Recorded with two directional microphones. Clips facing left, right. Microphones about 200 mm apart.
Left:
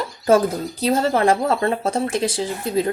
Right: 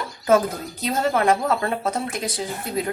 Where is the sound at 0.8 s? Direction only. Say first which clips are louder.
Left 3 dB; 30° left (ahead or behind).